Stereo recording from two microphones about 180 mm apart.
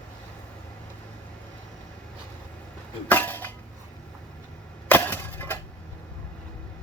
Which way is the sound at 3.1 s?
10° left (ahead or behind).